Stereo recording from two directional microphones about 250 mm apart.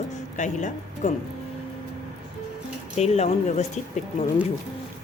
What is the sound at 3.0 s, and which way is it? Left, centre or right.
Speech, left.